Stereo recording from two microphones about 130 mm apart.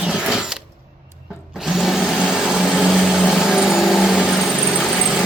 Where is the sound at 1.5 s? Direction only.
5° right (ahead or behind).